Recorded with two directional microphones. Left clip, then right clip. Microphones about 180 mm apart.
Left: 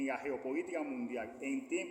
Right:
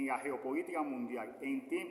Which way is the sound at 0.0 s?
15° right (ahead or behind).